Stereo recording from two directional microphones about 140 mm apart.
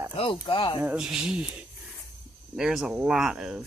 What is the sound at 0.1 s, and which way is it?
Speech, 40° left (ahead or behind).